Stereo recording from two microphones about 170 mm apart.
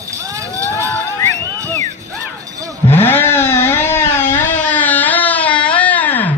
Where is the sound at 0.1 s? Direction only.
20° right (ahead or behind).